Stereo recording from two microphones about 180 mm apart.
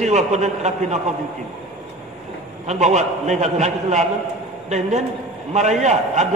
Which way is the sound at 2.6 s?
40° right (ahead or behind).